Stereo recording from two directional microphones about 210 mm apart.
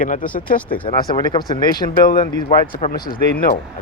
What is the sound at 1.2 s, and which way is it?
Speech, 20° left (ahead or behind).